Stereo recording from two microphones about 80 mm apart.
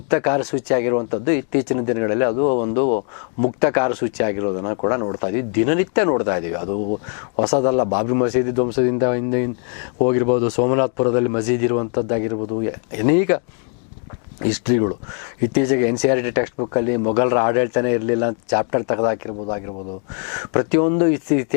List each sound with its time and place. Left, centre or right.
0.1 s speech: centre
14.4 s speech: centre